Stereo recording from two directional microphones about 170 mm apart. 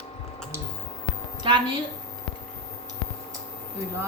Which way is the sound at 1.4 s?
25° right (ahead or behind).